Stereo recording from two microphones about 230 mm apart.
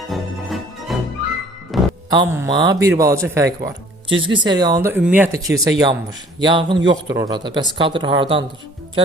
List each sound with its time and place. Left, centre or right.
0.1 s music: centre
2.0 s speech: centre